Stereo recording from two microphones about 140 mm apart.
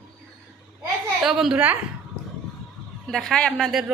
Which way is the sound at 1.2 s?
Centre (ahead or behind).